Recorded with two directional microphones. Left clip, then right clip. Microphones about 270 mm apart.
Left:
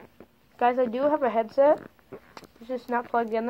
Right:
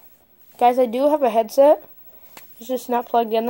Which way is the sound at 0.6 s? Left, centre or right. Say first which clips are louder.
Right 7 dB; right.